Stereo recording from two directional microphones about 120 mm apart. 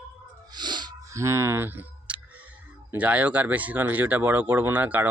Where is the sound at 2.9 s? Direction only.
10° right (ahead or behind).